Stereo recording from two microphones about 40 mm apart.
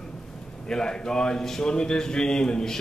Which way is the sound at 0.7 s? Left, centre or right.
Centre.